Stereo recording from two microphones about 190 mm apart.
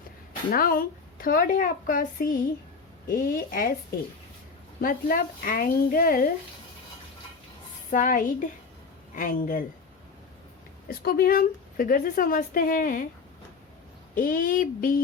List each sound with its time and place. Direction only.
0.5 s a woman's voice: 50° left (ahead or behind)
4.8 s a woman's voice: 50° left (ahead or behind)
7.9 s a woman's voice: 45° left (ahead or behind)
10.8 s a woman's voice: 50° left (ahead or behind)
14.2 s a woman's voice: 45° left (ahead or behind)